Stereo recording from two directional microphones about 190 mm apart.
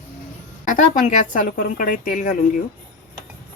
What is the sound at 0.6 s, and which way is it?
A woman's voice, 40° left (ahead or behind).